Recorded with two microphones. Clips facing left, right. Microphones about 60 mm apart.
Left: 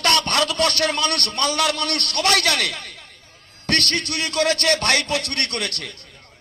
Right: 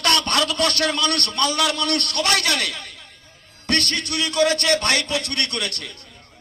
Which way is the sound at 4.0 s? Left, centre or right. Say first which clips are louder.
Right 2 dB; left.